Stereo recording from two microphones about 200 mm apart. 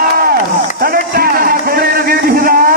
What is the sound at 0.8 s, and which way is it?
Music, 50° right (ahead or behind).